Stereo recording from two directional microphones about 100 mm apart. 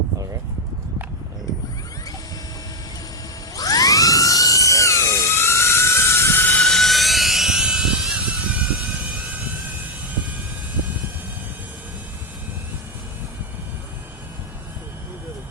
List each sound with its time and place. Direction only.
3.5 s music: 35° left (ahead or behind); by 9.4 s 15° right (ahead or behind)